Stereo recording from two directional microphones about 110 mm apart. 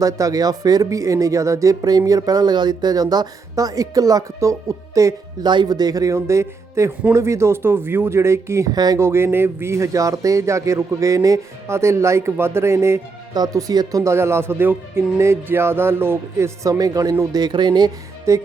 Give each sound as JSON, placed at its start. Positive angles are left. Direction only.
{"t": 0.0, "sound": "speech", "side_deg": -30}
{"t": 5.5, "sound": "speech", "side_deg": -40}
{"t": 8.7, "sound": "speech", "side_deg": -35}
{"t": 9.0, "sound": "speech", "side_deg": -25}